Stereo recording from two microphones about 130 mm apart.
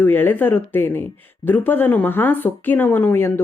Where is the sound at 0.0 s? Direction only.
15° left (ahead or behind).